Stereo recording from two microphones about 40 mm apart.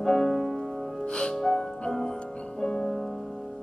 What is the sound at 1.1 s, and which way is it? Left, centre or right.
Music, left.